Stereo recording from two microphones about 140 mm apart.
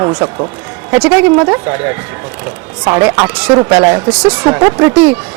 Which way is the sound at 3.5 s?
35° right (ahead or behind).